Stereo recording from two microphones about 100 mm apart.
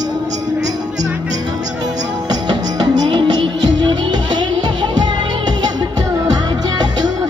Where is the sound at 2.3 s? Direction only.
45° right (ahead or behind).